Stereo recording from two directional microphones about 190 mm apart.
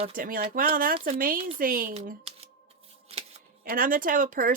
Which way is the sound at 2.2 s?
30° right (ahead or behind).